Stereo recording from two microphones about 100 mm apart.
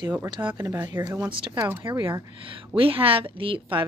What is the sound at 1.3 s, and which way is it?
Speech, 55° right (ahead or behind).